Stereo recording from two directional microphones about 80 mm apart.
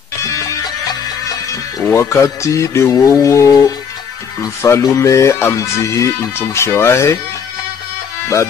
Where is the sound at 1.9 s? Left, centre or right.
Left.